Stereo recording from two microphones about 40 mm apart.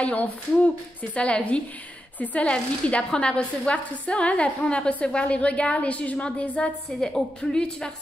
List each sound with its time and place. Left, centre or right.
0.0 s a woman's voice: left
7.5 s a woman's voice: left